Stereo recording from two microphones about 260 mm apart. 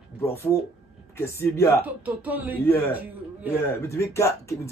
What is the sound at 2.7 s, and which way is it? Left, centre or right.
Speech, centre.